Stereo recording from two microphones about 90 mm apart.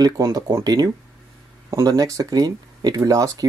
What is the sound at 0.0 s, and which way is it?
Speech, 45° right (ahead or behind).